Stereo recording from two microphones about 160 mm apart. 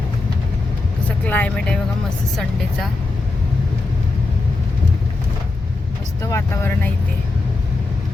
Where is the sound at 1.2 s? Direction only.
10° left (ahead or behind).